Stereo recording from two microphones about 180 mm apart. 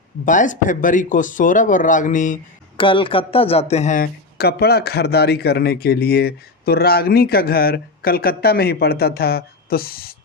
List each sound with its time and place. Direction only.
0.3 s speech: 45° left (ahead or behind)
2.7 s speech: 30° left (ahead or behind); by 10.2 s 55° left (ahead or behind)